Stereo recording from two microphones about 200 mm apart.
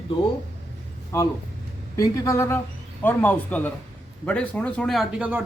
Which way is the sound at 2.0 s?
15° left (ahead or behind).